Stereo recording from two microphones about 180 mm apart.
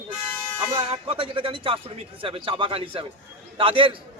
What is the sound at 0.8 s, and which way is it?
A man's voice, 30° right (ahead or behind).